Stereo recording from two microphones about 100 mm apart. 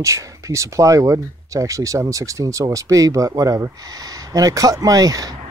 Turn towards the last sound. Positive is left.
turn(degrees=-40)  # may be behind; listen again after turning